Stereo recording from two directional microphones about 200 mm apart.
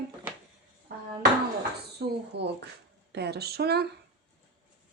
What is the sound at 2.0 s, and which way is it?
Speech, 60° right (ahead or behind).